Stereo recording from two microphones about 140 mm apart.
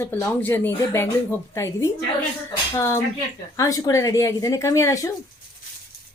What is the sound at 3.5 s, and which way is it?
Speech, 25° left (ahead or behind).